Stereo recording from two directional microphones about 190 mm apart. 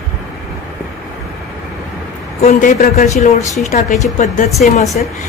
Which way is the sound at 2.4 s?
45° left (ahead or behind).